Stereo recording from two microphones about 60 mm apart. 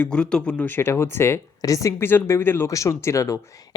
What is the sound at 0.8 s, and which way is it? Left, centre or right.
Speech, left.